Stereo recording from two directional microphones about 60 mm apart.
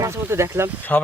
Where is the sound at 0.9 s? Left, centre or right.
Left.